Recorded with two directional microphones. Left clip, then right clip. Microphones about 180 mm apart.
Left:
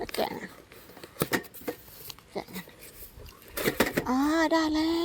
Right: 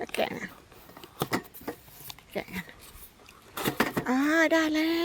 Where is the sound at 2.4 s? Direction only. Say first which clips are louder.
Right 2 dB; 30° right (ahead or behind).